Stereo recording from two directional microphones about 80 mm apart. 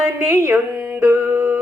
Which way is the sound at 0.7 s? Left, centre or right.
Right.